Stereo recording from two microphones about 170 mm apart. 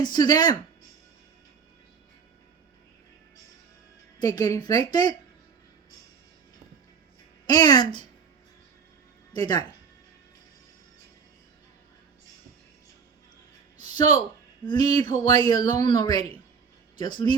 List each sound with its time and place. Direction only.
0.0 s speech: 25° left (ahead or behind)
4.2 s speech: 20° left (ahead or behind)
7.4 s speech: 25° left (ahead or behind)
9.3 s speech: 25° left (ahead or behind)
14.7 s speech: 25° left (ahead or behind)